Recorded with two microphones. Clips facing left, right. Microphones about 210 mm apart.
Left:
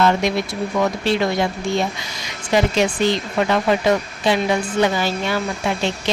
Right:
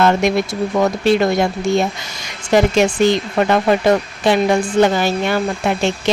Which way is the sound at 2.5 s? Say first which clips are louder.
Right 4 dB; 50° right (ahead or behind).